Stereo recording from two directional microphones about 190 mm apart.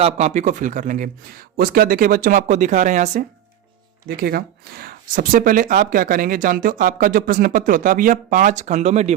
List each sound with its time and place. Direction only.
0.0 s speech: 35° right (ahead or behind)
4.2 s speech: 55° right (ahead or behind); by 9.1 s 35° right (ahead or behind)